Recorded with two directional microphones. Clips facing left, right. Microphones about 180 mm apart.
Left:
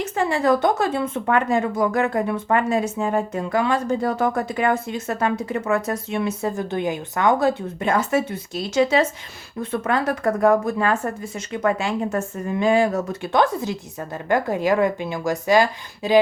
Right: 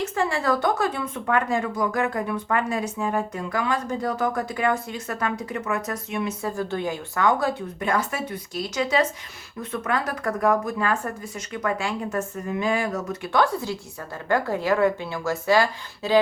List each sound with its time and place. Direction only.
0.0 s speech: 20° left (ahead or behind)